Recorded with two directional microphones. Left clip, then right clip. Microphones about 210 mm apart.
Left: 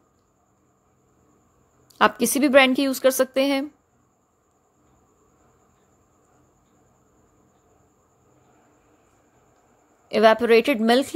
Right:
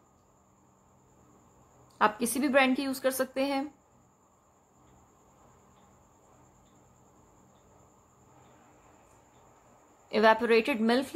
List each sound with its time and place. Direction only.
2.0 s a woman's voice: 30° left (ahead or behind)
10.0 s a woman's voice: 25° left (ahead or behind)